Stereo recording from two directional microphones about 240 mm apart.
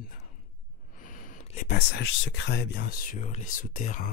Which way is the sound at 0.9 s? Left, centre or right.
Left.